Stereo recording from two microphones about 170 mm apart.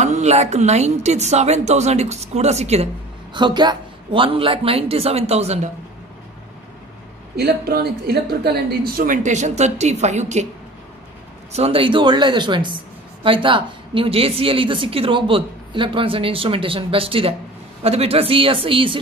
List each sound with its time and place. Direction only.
0.0 s a woman's voice: 45° right (ahead or behind)
3.3 s a woman's voice: 25° right (ahead or behind)
7.3 s speech: 65° right (ahead or behind)
8.8 s a woman's voice: 55° right (ahead or behind)
11.5 s a woman's voice: 35° right (ahead or behind)